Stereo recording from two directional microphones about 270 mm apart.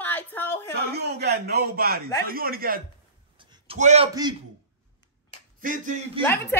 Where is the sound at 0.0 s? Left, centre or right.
Centre.